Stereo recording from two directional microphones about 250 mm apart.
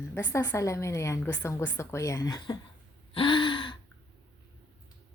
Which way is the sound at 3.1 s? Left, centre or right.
Left.